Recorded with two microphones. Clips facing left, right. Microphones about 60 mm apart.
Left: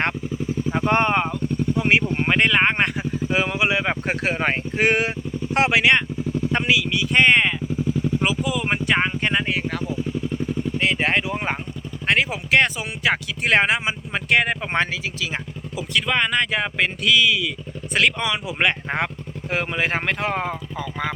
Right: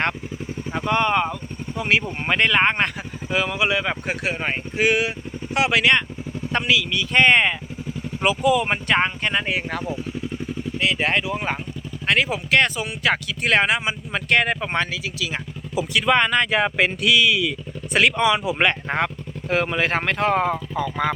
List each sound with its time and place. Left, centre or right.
0.9 s speech: left
1.8 s speech: left
2.1 s speech: centre
4.0 s speech: left
5.7 s speech: centre
7.1 s speech: centre
9.5 s speech: centre
10.9 s speech: left
15.7 s speech: centre
18.9 s speech: centre